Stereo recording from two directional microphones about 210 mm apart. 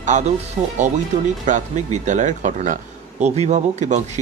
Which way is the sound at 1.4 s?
35° right (ahead or behind).